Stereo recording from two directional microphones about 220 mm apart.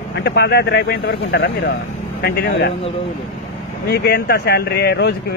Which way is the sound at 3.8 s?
50° left (ahead or behind).